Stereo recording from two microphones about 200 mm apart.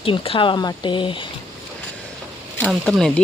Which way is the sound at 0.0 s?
25° left (ahead or behind).